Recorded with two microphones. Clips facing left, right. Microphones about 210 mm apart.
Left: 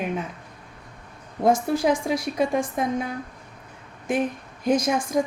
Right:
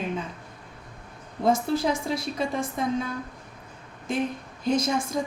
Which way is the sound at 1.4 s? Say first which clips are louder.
Left 3 dB; 15° left (ahead or behind).